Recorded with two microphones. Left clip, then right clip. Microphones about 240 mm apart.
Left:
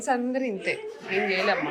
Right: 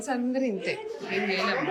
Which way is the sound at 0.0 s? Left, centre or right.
Centre.